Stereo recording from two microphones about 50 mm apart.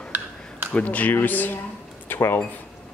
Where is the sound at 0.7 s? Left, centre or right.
Left.